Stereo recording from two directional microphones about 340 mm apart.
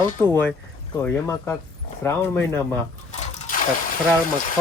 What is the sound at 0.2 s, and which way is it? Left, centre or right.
Speech, centre.